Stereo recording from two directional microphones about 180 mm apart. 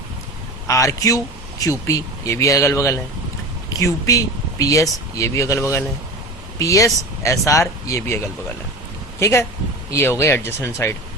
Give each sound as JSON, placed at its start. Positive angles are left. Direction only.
{"t": 0.7, "sound": "speech", "side_deg": 15}